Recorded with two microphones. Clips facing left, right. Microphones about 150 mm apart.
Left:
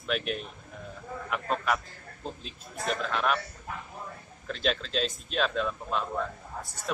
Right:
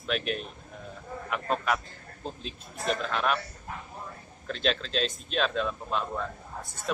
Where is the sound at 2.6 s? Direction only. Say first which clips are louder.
Right 1 dB; 25° right (ahead or behind).